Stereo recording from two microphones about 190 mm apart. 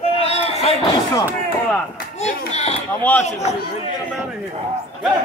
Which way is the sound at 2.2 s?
35° left (ahead or behind).